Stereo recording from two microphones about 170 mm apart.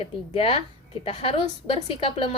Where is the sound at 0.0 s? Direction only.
30° left (ahead or behind).